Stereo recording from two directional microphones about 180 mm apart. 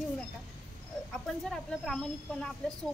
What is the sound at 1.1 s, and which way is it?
Speech, centre (ahead or behind).